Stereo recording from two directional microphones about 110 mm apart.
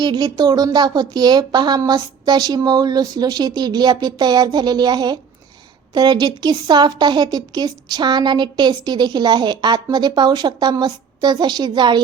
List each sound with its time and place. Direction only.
0.0 s a woman's voice: 40° right (ahead or behind)